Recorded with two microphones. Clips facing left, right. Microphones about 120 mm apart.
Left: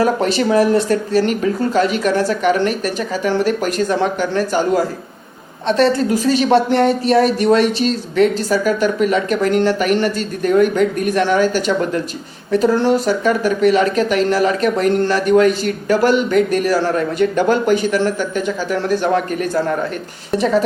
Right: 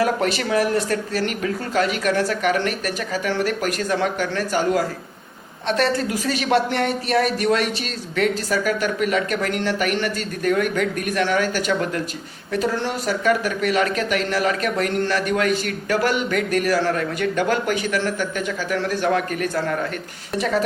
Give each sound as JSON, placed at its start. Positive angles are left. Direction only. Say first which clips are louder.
{"t": 0.0, "sound": "speech", "louder": "left 5 dB", "side_deg": 30}